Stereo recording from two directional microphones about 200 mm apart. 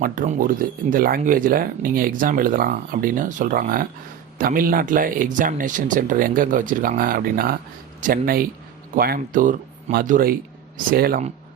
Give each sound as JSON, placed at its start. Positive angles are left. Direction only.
{"t": 0.0, "sound": "speech", "side_deg": -45}